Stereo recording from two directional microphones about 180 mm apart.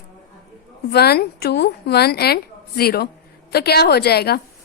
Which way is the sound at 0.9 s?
60° left (ahead or behind).